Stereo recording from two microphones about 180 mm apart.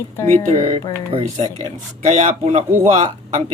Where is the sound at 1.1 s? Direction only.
40° right (ahead or behind).